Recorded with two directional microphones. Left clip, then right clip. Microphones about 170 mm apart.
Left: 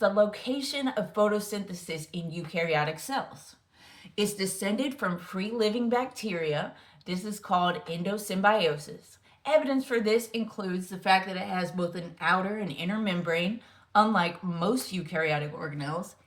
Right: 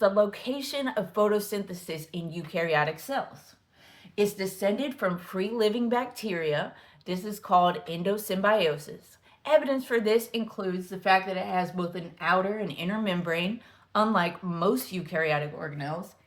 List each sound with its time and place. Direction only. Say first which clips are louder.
0.0 s speech: right 1 dB; 30° right (ahead or behind)
4.9 s speech: right 2 dB; 25° right (ahead or behind)